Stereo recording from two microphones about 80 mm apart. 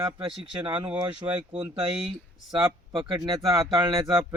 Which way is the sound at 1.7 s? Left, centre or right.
Right.